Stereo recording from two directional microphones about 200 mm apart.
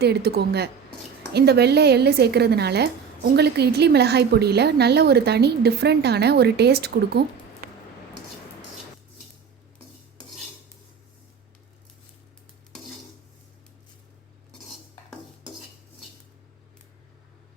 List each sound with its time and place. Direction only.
0.0 s speech: 55° right (ahead or behind)